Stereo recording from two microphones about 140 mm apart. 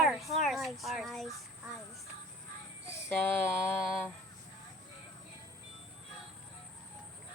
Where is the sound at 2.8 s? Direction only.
15° left (ahead or behind).